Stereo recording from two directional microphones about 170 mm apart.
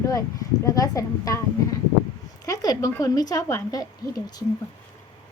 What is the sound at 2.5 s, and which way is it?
Speech, 20° left (ahead or behind).